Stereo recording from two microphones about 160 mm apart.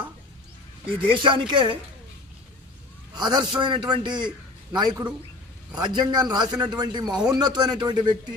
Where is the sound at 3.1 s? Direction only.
25° right (ahead or behind).